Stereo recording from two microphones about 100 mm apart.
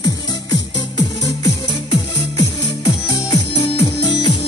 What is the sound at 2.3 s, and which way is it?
Music, 35° left (ahead or behind).